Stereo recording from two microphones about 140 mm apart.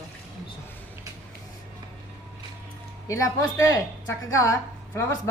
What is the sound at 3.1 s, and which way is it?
A woman's voice, 20° left (ahead or behind).